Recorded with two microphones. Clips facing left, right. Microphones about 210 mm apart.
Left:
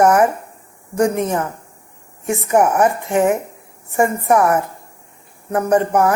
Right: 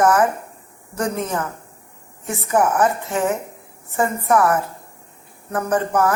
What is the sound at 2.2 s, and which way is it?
A woman's voice, 15° left (ahead or behind).